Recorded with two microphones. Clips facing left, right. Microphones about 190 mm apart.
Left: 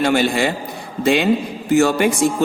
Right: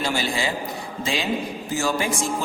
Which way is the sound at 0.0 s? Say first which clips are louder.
Left 8 dB; 60° left (ahead or behind).